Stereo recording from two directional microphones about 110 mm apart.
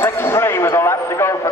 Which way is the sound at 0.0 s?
25° left (ahead or behind).